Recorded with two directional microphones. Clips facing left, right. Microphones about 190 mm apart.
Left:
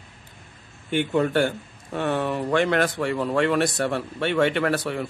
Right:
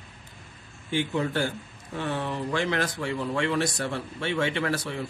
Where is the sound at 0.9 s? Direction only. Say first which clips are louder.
Left 5 dB; 60° left (ahead or behind).